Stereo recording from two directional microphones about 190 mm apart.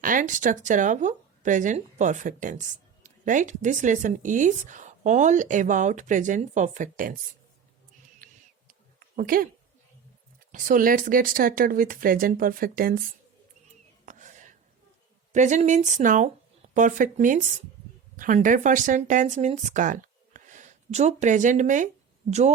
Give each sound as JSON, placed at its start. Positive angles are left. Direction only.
{"t": 0.0, "sound": "speech", "side_deg": -45}
{"t": 8.2, "sound": "a sound", "side_deg": -45}
{"t": 10.5, "sound": "speech", "side_deg": -45}
{"t": 14.0, "sound": "whispering", "side_deg": -40}
{"t": 15.3, "sound": "speech", "side_deg": -40}